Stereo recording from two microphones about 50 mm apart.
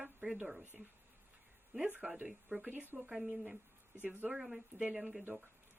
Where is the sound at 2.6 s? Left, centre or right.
Right.